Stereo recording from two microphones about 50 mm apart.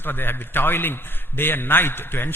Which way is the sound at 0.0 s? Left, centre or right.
Left.